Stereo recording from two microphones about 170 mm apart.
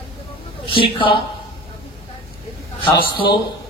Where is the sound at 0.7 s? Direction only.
30° left (ahead or behind).